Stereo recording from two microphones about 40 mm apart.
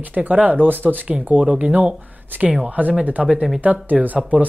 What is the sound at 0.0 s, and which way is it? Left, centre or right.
Speech, right.